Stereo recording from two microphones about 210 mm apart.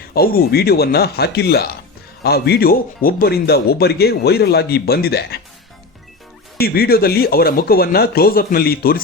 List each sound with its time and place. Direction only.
0.0 s speech: 45° left (ahead or behind)
6.6 s speech: 45° left (ahead or behind)